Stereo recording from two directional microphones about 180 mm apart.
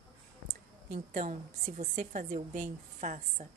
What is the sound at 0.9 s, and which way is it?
A woman's voice, 45° right (ahead or behind).